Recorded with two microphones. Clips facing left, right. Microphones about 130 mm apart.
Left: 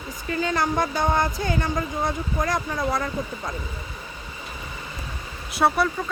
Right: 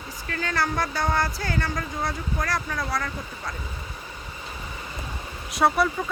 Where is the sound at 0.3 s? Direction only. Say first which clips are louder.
Left 3 dB; 20° left (ahead or behind).